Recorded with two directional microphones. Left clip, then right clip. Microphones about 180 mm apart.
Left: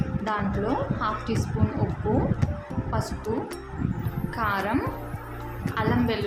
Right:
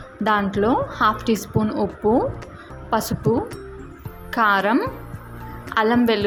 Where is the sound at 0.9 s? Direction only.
45° right (ahead or behind).